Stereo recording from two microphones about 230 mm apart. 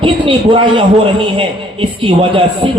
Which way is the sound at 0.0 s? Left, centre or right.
Right.